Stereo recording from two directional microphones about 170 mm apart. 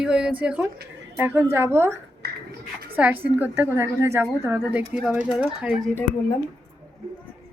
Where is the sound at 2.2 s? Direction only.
70° right (ahead or behind).